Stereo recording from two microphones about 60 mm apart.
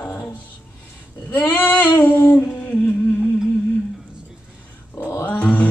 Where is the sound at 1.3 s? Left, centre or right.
Left.